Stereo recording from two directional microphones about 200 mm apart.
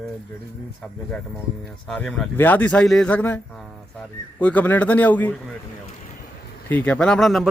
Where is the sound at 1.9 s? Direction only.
Centre (ahead or behind).